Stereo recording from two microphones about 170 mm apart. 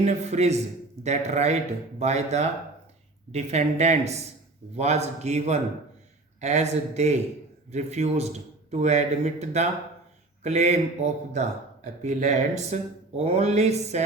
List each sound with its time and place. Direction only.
0.0 s a man's voice: 40° right (ahead or behind)